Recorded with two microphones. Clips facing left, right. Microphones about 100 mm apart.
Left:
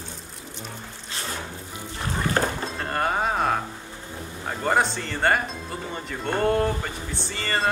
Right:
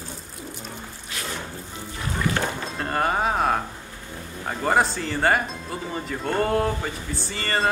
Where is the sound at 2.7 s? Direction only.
Centre (ahead or behind).